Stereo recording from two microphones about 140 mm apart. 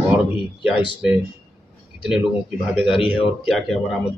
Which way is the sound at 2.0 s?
5° right (ahead or behind).